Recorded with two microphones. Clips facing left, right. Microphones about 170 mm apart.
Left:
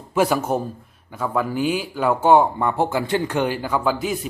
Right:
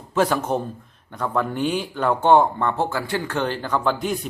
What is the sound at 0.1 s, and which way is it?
Speech, 10° left (ahead or behind).